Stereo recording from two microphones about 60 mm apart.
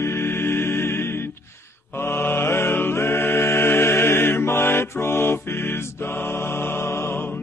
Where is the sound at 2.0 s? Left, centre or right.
Left.